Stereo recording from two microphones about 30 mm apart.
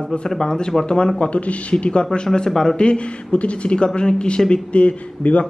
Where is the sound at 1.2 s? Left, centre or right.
Left.